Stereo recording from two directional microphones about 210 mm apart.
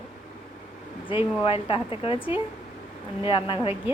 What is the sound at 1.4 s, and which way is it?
Speech, 25° left (ahead or behind).